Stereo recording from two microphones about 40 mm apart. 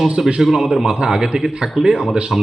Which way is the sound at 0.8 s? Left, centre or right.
Centre.